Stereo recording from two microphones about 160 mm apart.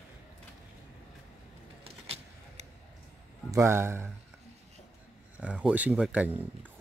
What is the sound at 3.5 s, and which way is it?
Speech, 15° right (ahead or behind).